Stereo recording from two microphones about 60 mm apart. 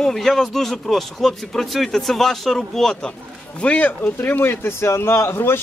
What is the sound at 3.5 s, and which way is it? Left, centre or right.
Speech, left.